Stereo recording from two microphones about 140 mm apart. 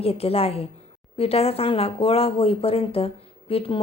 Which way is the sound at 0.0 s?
45° left (ahead or behind).